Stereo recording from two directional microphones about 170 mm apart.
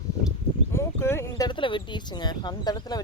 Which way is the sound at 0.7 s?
15° left (ahead or behind).